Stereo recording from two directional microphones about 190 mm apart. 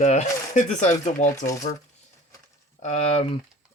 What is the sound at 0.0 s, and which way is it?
Speech, 40° left (ahead or behind).